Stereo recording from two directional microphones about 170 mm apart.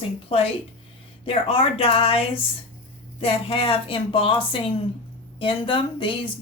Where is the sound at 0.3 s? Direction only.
35° left (ahead or behind).